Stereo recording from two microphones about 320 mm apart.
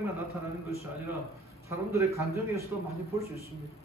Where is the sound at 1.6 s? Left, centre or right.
Centre.